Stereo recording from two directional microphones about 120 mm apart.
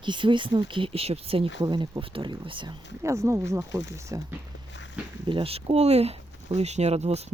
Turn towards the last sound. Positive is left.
turn(degrees=-65)  # may be behind; listen again after turning